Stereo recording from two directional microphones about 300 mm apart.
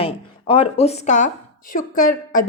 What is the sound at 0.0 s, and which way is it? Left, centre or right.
A woman's voice, centre.